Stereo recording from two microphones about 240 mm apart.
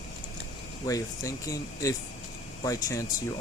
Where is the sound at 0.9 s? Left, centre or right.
Centre.